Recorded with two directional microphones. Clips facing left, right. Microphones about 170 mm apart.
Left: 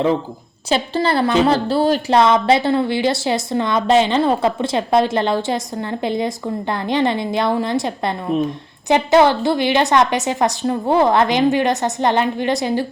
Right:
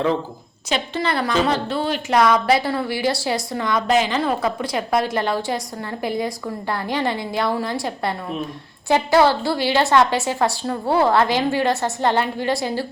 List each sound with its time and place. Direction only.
0.7 s a woman's voice: 30° left (ahead or behind)
2.1 s a woman's voice: 25° left (ahead or behind)